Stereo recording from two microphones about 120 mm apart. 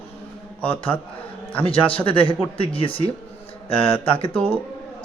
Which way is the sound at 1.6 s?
50° left (ahead or behind).